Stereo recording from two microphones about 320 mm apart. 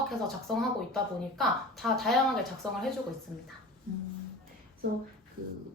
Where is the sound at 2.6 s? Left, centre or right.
Centre.